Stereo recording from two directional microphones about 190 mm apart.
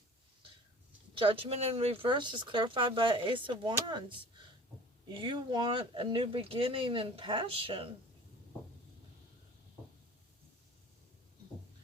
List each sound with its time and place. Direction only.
1.1 s speech: 25° right (ahead or behind)
5.1 s speech: 25° right (ahead or behind)